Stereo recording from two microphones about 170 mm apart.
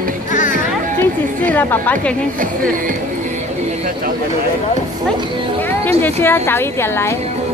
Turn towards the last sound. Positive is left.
turn(degrees=15)  # may be behind; listen again after turning